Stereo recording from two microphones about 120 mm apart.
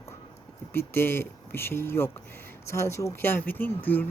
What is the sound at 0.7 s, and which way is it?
A woman's voice, 20° left (ahead or behind).